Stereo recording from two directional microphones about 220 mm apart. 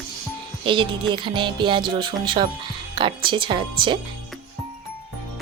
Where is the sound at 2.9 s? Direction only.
20° right (ahead or behind).